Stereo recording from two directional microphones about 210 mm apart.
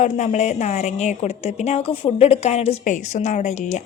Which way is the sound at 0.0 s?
35° left (ahead or behind).